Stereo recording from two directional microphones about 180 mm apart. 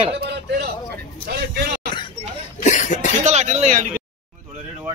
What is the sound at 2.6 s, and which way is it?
Cough, 40° left (ahead or behind).